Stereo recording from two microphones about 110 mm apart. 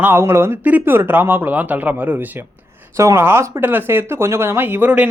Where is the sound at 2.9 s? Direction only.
30° right (ahead or behind).